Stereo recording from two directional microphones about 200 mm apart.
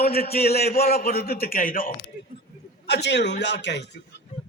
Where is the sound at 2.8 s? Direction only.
60° left (ahead or behind).